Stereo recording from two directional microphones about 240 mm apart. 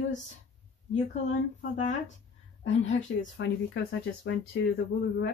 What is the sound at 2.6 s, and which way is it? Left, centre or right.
Speech, left.